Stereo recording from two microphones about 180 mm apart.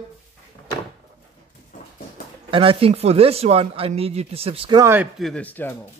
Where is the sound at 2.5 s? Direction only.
30° right (ahead or behind).